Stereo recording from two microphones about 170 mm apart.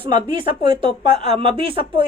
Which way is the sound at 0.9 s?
40° left (ahead or behind).